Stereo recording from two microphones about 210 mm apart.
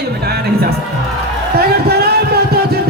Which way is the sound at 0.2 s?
50° right (ahead or behind).